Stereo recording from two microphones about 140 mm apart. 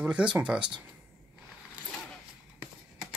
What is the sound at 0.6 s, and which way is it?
Speech, 35° right (ahead or behind).